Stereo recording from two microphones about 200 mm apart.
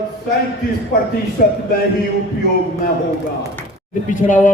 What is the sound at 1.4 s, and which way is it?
Speech, 45° left (ahead or behind).